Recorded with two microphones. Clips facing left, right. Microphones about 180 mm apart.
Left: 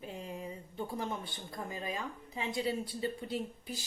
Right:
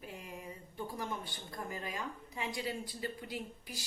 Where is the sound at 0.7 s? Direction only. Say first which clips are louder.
Left 2 dB; 25° left (ahead or behind).